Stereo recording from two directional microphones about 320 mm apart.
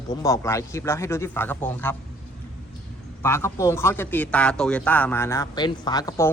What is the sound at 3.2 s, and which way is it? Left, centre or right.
Speech, centre.